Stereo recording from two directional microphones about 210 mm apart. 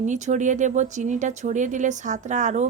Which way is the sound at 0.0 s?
35° right (ahead or behind).